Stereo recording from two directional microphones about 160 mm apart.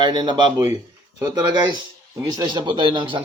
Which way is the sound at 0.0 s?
25° right (ahead or behind).